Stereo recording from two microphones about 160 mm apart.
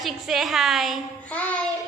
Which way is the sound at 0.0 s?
Centre (ahead or behind).